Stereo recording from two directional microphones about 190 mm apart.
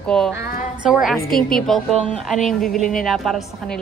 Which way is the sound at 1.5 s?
Centre (ahead or behind).